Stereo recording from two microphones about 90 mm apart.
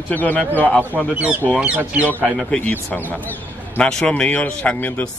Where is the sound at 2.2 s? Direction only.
5° left (ahead or behind).